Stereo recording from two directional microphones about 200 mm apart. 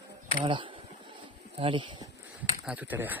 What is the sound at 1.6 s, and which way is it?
Speech, 25° right (ahead or behind).